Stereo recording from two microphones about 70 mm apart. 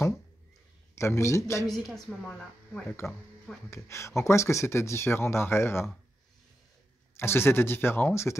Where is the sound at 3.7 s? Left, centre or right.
Left.